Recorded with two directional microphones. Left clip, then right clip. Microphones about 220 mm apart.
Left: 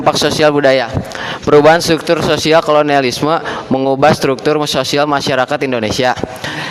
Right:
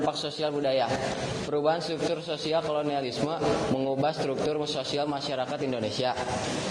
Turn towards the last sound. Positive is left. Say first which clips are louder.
# left 15 dB
turn(degrees=50)  # may be behind; listen again after turning